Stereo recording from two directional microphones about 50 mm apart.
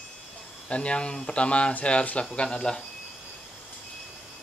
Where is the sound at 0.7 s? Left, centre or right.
Left.